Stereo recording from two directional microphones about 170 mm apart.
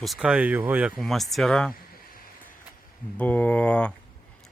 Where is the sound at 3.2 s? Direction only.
10° left (ahead or behind).